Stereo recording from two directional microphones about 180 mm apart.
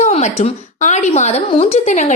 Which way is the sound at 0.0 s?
35° left (ahead or behind).